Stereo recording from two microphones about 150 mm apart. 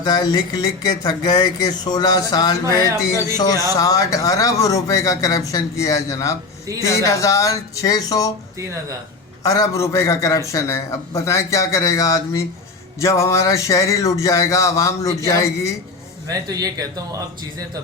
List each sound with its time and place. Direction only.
0.0 s speech: 25° left (ahead or behind)
9.4 s speech: 25° left (ahead or behind)
16.3 s a man's voice: 25° right (ahead or behind)